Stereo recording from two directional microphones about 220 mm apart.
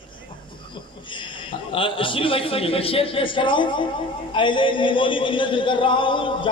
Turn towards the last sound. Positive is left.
turn(degrees=20)  # may be behind; listen again after turning